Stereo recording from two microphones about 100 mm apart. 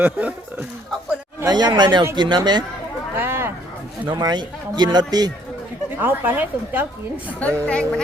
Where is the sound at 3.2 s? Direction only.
25° right (ahead or behind).